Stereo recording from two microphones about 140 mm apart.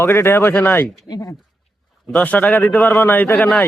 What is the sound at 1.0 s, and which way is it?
Speech, 25° left (ahead or behind).